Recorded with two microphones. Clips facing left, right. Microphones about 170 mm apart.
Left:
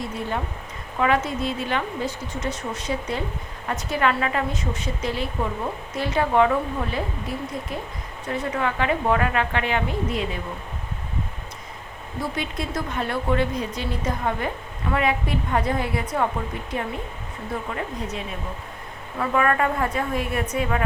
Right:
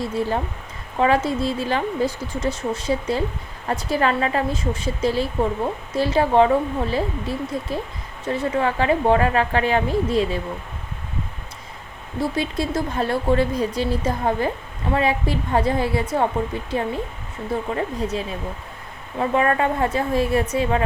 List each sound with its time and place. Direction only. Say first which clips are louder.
0.0 s a woman's voice: right 5 dB; 35° right (ahead or behind)
12.4 s a woman's voice: right 6 dB; 30° right (ahead or behind)